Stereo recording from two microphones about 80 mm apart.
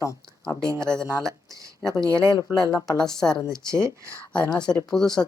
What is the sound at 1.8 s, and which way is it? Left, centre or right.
Speech, centre.